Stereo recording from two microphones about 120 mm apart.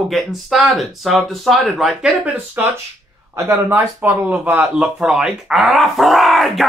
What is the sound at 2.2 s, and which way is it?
Speech, 15° right (ahead or behind).